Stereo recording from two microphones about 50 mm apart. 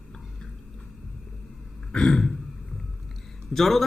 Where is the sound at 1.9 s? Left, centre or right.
Centre.